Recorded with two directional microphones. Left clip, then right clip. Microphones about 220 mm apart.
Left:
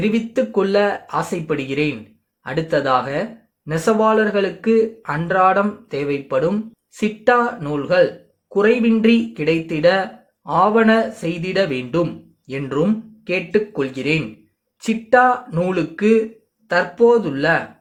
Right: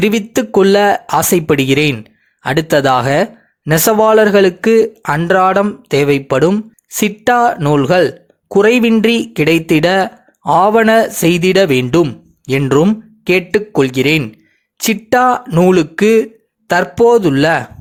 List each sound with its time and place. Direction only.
0.0 s speech: 45° right (ahead or behind)